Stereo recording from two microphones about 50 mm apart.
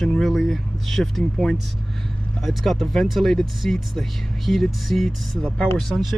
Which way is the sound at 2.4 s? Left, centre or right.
Centre.